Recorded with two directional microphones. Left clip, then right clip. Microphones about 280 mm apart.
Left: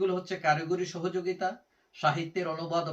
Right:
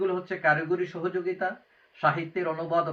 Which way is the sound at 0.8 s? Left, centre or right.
Centre.